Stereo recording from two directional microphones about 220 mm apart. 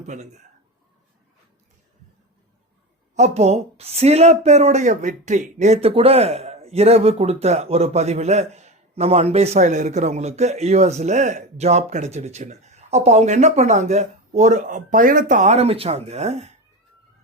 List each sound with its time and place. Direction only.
0.0 s a man's voice: 30° right (ahead or behind)
3.2 s a woman's voice: 30° right (ahead or behind)